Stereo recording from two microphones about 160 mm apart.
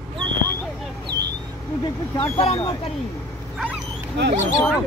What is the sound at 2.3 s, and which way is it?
Speech, 40° left (ahead or behind).